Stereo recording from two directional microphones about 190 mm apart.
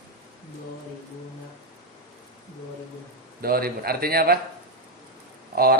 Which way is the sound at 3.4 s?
50° right (ahead or behind).